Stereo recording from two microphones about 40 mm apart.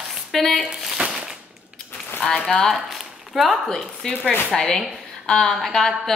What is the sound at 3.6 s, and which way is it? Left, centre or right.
A woman's voice, centre.